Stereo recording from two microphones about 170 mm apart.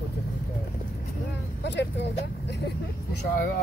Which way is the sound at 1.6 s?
90° left.